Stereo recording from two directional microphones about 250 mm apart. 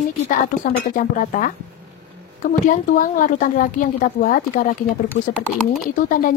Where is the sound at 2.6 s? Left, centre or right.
Left.